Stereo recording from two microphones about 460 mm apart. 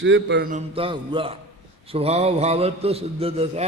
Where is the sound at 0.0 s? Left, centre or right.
Right.